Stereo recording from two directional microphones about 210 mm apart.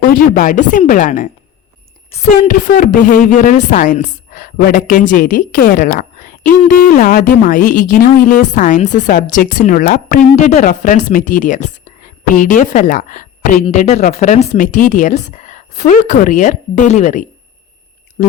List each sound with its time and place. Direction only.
0.0 s a woman's voice: 40° left (ahead or behind)